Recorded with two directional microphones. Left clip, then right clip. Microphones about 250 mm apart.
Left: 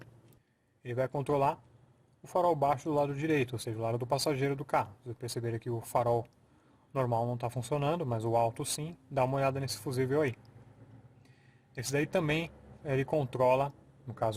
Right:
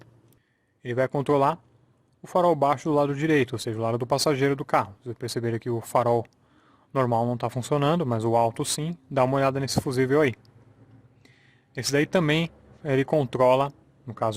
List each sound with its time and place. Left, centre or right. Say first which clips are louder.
0.8 s speech: right 8 dB; right
11.7 s speech: right 8 dB; right